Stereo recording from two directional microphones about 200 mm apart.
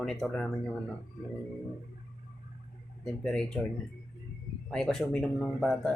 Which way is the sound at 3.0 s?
5° left (ahead or behind).